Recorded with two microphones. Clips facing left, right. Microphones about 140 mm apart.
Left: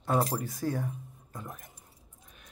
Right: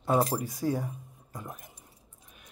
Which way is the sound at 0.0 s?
10° right (ahead or behind).